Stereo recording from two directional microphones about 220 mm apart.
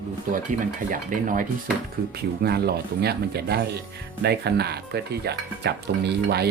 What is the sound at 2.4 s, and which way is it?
Speech, 45° right (ahead or behind).